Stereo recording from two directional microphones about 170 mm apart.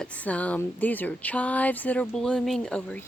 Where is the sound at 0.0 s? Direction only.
10° left (ahead or behind).